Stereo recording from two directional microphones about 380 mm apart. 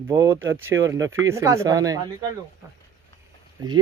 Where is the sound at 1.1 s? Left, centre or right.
Centre.